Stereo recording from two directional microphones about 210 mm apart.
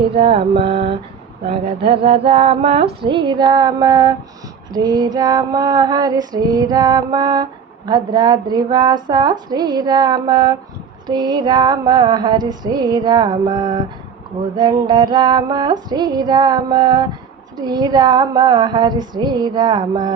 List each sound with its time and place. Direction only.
0.2 s female singing: 25° right (ahead or behind)